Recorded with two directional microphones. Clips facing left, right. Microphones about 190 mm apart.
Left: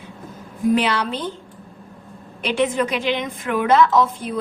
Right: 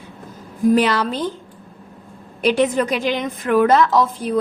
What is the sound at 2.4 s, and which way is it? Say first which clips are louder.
A woman's voice: right 3 dB; 40° right (ahead or behind).